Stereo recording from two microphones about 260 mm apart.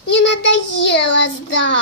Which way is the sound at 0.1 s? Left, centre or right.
Left.